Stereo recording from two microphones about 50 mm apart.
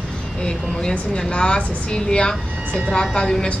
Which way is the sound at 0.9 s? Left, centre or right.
Centre.